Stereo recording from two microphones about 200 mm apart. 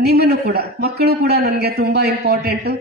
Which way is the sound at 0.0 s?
55° right (ahead or behind).